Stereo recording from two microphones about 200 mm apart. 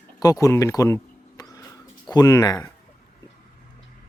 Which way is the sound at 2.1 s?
15° left (ahead or behind).